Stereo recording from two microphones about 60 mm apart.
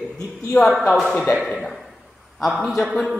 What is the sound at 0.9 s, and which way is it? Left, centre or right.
A man's voice, centre.